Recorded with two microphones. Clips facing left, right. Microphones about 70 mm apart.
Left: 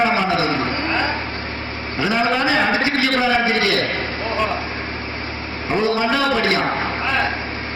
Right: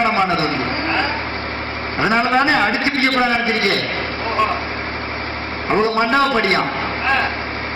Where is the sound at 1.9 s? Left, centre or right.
Right.